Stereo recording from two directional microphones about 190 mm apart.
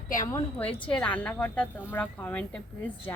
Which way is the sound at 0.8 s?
5° left (ahead or behind).